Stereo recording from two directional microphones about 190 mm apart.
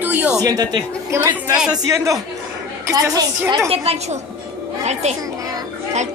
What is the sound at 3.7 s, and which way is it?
A woman's voice, 35° right (ahead or behind).